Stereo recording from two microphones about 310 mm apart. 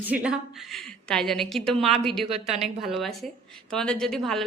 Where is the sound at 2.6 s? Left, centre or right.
Centre.